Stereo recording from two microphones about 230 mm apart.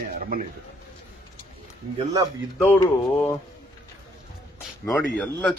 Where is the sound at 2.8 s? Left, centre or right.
Centre.